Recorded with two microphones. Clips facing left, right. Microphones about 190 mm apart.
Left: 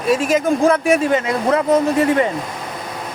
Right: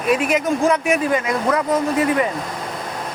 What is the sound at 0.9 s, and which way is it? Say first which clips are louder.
Speech: left 3 dB; 25° left (ahead or behind).